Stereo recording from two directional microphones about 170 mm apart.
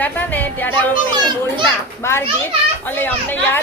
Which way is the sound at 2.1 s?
15° left (ahead or behind).